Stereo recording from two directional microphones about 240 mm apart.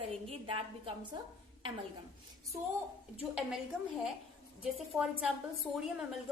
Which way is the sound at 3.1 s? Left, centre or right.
Centre.